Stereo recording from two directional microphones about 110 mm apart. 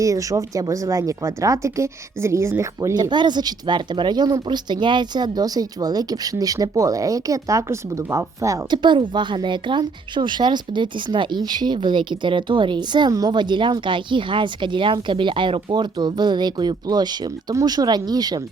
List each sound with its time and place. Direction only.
0.0 s speech: 30° right (ahead or behind)
2.9 s speech: 40° right (ahead or behind)
8.7 s a woman's voice: 45° right (ahead or behind)